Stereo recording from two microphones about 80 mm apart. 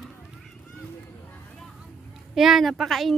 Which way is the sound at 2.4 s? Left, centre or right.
Centre.